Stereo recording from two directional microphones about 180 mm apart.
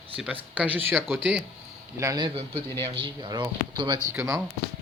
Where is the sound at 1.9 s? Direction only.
20° right (ahead or behind).